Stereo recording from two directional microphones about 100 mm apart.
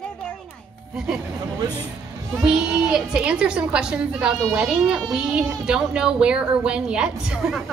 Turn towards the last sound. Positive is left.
turn(degrees=-5)  # may be behind; listen again after turning